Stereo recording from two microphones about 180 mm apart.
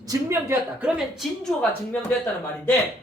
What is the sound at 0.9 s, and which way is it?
A woman's voice, centre (ahead or behind).